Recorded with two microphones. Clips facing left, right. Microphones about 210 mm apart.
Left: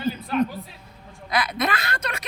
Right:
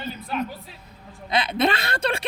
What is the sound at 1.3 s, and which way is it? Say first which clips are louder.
Speech: right 3 dB; 25° right (ahead or behind).